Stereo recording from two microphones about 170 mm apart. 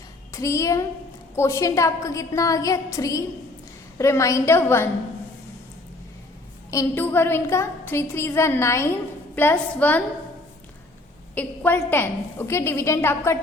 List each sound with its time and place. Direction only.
0.3 s a woman's voice: 20° left (ahead or behind)
6.7 s a woman's voice: 15° left (ahead or behind)
11.3 s a woman's voice: 10° left (ahead or behind)